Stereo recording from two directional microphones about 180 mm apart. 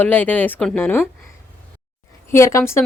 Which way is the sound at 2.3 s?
15° left (ahead or behind).